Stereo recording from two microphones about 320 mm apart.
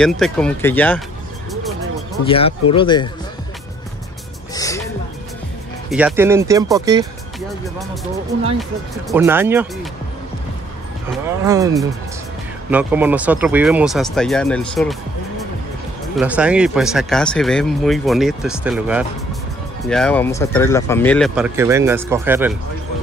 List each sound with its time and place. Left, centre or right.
0.0 s speech: centre
2.2 s speech: centre
4.6 s music: centre
5.9 s speech: centre
7.6 s speech: centre
9.1 s speech: centre
11.4 s speech: centre
16.2 s speech: centre